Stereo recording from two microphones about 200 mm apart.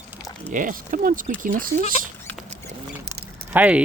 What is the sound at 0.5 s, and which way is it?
Speech, 40° right (ahead or behind).